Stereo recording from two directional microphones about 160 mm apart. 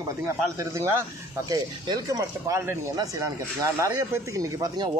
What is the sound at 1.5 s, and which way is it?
A man's voice, 20° right (ahead or behind).